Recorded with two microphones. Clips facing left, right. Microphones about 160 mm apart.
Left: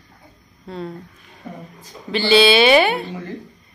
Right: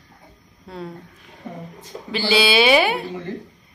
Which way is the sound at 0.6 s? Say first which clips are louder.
Left 3 dB; 5° right (ahead or behind).